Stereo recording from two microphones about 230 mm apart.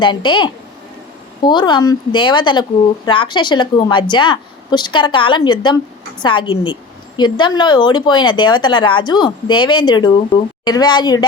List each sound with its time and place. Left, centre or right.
0.0 s speech: centre